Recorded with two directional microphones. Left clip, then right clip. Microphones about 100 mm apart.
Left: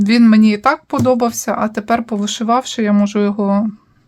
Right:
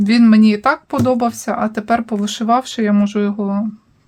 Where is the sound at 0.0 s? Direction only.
30° left (ahead or behind); by 3.7 s 60° left (ahead or behind).